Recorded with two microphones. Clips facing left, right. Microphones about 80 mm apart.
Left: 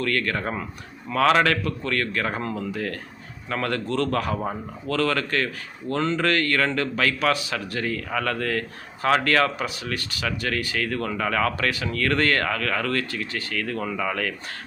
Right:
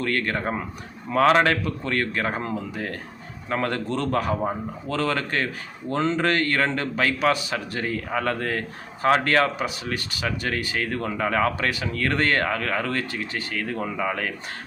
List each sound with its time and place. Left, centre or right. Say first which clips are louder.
0.0 s speech: even; right